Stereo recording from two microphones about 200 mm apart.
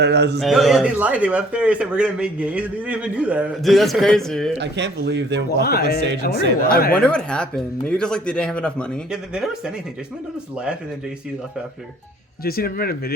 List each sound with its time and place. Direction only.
0.0 s speech: 55° right (ahead or behind)
0.3 s a man's voice: centre (ahead or behind)
4.5 s speech: 60° right (ahead or behind)
5.5 s speech: 50° left (ahead or behind)
6.9 s a man's voice: 5° left (ahead or behind)
12.5 s speech: 50° left (ahead or behind)